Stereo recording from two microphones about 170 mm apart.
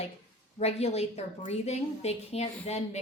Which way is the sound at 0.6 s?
35° left (ahead or behind).